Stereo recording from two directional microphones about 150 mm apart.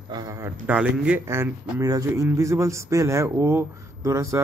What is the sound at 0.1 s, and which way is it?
Speech, 25° right (ahead or behind).